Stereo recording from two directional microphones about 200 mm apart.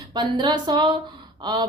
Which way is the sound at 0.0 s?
20° right (ahead or behind).